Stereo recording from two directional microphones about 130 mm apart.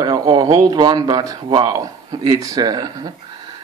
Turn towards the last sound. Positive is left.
turn(degrees=-30)  # may be behind; listen again after turning